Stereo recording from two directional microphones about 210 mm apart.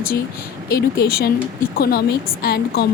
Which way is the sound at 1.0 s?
45° left (ahead or behind).